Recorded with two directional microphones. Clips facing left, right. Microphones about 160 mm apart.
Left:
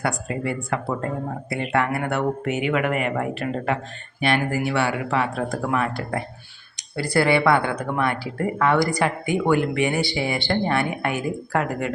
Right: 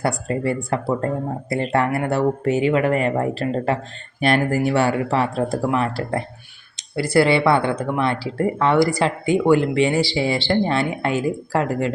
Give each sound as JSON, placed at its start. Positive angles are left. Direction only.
{"t": 0.0, "sound": "speech", "side_deg": -35}